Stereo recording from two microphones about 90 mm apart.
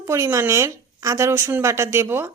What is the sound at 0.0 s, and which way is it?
A woman's voice, 35° right (ahead or behind).